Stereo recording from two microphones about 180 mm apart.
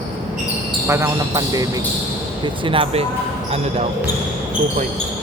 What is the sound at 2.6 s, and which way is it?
Speech, 30° right (ahead or behind).